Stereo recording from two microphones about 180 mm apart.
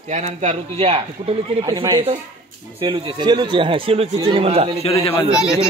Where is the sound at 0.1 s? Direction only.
40° right (ahead or behind).